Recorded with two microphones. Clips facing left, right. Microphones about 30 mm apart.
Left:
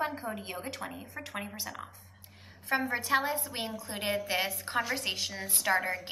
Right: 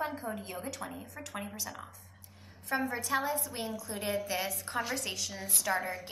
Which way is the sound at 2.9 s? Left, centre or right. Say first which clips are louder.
Left 3 dB; left.